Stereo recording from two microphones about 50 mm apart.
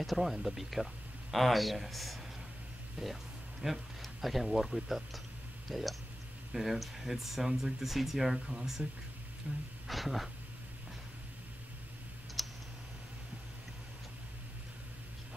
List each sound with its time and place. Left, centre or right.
0.0 s speech: centre
3.0 s speech: centre
9.5 s speech: right
9.8 s speech: centre
12.4 s clicking: centre